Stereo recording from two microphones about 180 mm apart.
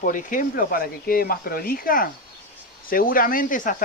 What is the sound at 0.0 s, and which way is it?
Speech, 45° left (ahead or behind).